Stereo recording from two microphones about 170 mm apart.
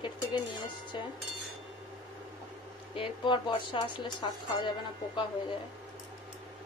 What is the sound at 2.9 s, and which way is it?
Speech, 30° left (ahead or behind).